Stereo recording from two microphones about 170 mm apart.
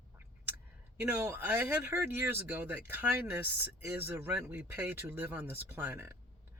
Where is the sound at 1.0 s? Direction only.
15° right (ahead or behind).